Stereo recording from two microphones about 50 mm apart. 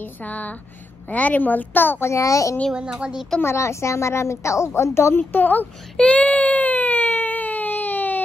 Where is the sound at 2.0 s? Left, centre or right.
Left.